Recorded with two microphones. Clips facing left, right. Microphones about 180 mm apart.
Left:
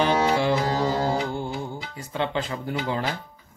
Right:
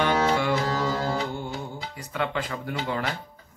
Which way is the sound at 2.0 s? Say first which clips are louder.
Left 2 dB; 25° left (ahead or behind).